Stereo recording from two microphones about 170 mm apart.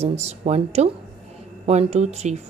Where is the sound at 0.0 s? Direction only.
40° right (ahead or behind).